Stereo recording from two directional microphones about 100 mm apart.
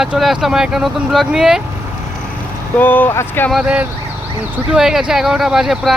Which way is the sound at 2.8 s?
15° left (ahead or behind).